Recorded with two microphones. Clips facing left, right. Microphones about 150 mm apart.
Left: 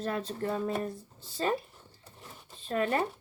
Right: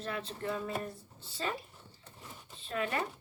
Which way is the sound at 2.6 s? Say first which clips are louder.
Left 6 dB; 40° left (ahead or behind).